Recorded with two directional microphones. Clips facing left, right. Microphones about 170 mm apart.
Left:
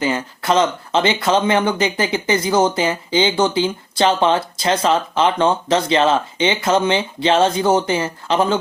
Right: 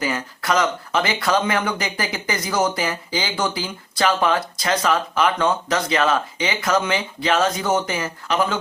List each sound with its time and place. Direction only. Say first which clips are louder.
0.0 s speech: left 4 dB; 25° left (ahead or behind)